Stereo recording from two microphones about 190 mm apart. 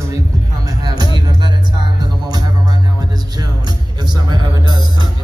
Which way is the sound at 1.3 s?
25° right (ahead or behind).